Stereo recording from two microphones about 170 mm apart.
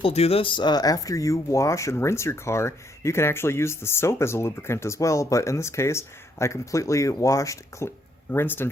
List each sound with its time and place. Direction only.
0.0 s speech: 35° left (ahead or behind); by 8.7 s 15° left (ahead or behind)